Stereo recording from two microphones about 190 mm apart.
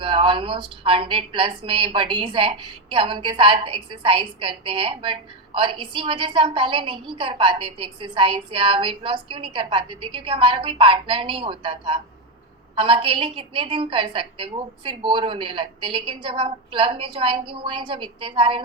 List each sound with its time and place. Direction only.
0.0 s a woman's voice: 25° right (ahead or behind)